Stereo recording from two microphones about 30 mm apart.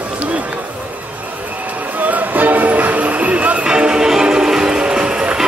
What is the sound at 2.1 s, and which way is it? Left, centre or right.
Music, right.